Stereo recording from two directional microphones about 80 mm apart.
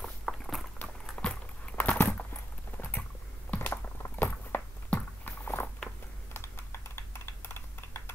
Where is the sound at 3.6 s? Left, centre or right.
Left.